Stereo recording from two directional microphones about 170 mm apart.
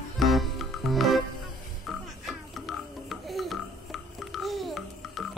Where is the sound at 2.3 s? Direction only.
Centre (ahead or behind).